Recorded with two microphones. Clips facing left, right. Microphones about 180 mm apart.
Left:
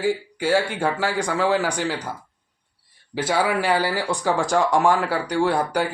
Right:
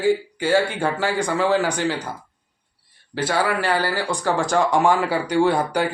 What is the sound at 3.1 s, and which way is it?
Speech, 10° left (ahead or behind).